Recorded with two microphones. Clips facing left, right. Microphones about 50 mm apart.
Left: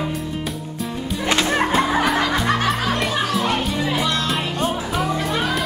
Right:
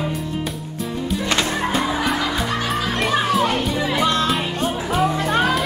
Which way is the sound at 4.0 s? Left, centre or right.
Right.